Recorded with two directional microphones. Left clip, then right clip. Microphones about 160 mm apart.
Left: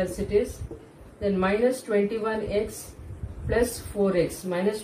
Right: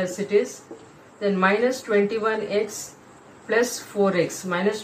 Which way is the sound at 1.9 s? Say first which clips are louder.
Right 4 dB; 10° left (ahead or behind).